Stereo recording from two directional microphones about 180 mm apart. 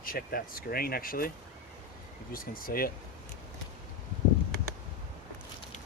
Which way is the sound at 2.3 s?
55° left (ahead or behind).